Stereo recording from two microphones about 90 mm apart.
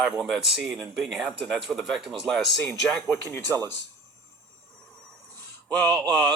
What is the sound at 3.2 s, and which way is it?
Speech, 25° left (ahead or behind).